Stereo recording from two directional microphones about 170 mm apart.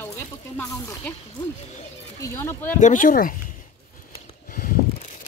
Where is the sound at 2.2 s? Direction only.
15° left (ahead or behind).